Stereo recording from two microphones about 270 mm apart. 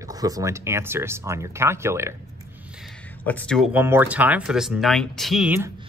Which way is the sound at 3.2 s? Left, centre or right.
Centre.